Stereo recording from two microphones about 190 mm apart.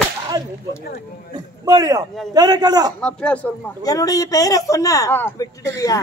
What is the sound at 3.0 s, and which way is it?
Speech, 5° left (ahead or behind).